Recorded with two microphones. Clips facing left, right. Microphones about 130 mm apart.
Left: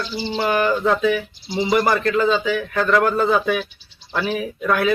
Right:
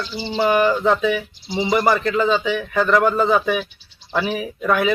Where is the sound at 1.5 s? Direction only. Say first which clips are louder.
Even; 10° right (ahead or behind).